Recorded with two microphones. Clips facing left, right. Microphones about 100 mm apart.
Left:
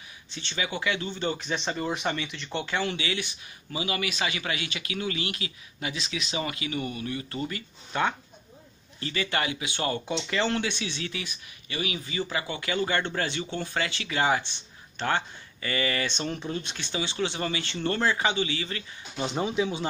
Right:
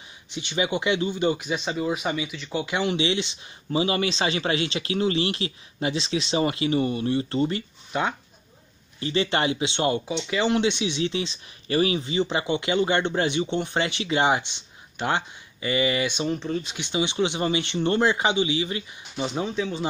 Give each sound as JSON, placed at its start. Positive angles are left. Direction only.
{"t": 0.3, "sound": "speech", "side_deg": -15}
{"t": 2.7, "sound": "speech", "side_deg": -20}
{"t": 7.9, "sound": "speech", "side_deg": -15}
{"t": 9.0, "sound": "speech", "side_deg": -25}
{"t": 10.0, "sound": "speech", "side_deg": -5}
{"t": 11.6, "sound": "speech", "side_deg": -35}
{"t": 16.3, "sound": "speech", "side_deg": 0}
{"t": 16.7, "sound": "speech", "side_deg": -20}
{"t": 19.1, "sound": "speech", "side_deg": 0}